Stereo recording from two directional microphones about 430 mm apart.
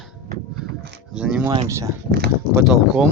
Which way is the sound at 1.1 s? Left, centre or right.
Centre.